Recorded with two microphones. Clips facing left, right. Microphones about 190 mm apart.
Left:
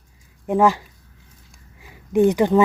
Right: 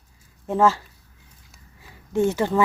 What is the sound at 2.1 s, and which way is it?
Speech, 15° left (ahead or behind).